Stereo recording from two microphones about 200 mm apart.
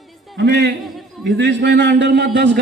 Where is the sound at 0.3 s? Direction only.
60° right (ahead or behind).